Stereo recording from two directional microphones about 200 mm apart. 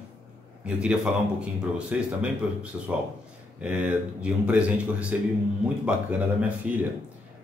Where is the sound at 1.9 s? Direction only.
5° right (ahead or behind).